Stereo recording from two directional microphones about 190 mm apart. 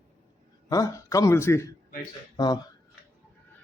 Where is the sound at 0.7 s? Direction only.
15° left (ahead or behind).